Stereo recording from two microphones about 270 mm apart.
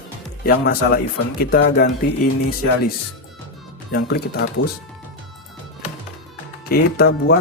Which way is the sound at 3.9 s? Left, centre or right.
Left.